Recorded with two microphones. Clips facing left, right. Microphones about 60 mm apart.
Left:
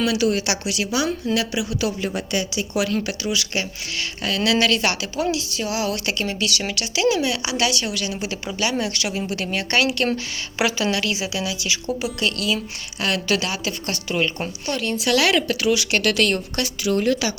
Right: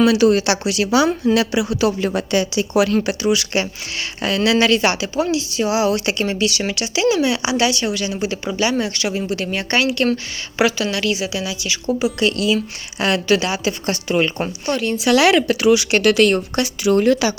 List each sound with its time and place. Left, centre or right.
0.0 s speech: right
0.3 s speech: right
1.3 s a woman's voice: right
2.0 s a woman's voice: right
4.4 s speech: centre
5.5 s speech: centre
11.9 s speech: centre
12.2 s speech: centre
13.2 s speech: centre
16.9 s a woman's voice: right